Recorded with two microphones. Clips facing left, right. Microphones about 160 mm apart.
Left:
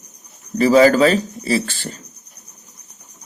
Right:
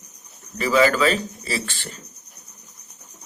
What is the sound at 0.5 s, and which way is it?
A man's voice, 35° left (ahead or behind).